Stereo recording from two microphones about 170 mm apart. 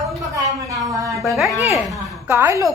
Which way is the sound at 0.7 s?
20° right (ahead or behind).